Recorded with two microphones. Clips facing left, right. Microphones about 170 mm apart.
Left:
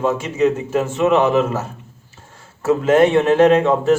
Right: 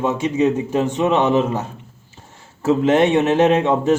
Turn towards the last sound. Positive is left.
turn(degrees=-20)  # may be behind; listen again after turning